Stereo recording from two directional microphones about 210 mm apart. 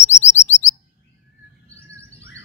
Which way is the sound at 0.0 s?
35° left (ahead or behind).